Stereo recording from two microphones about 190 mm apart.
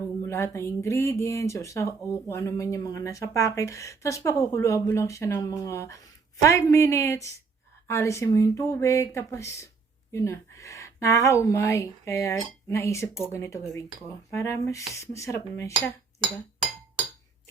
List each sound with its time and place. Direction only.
0.3 s a woman's voice: 15° left (ahead or behind)